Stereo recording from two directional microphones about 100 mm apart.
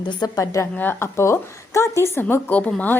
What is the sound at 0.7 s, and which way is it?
A woman's voice, 20° left (ahead or behind).